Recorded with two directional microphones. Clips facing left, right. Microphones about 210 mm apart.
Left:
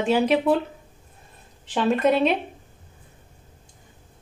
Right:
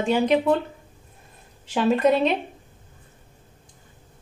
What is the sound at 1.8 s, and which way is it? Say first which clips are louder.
Speech: right 1 dB; centre (ahead or behind).